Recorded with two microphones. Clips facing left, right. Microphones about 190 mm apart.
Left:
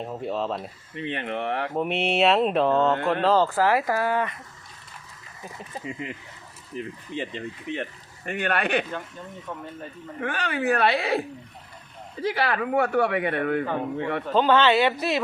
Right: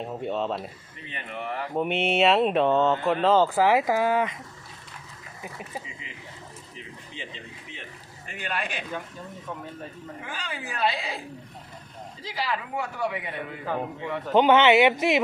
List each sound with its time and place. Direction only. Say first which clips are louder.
0.0 s speech: even; centre (ahead or behind)
0.9 s speech: left 9 dB; 70° left (ahead or behind)
1.7 s speech: right 3 dB; centre (ahead or behind)
3.5 s speech: right 1 dB; 15° right (ahead or behind)
5.4 s speech: right 1 dB; 15° right (ahead or behind)
5.8 s speech: left 10 dB; 55° left (ahead or behind)
10.2 s speech: left 11 dB; 65° left (ahead or behind)
14.3 s speech: right 2 dB; 20° right (ahead or behind)